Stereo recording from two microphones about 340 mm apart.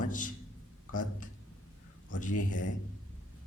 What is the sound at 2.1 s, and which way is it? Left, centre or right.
Speech, left.